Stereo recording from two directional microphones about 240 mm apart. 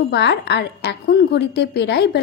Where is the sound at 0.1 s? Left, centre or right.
Left.